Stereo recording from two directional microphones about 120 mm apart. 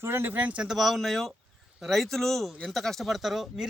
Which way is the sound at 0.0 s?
20° right (ahead or behind).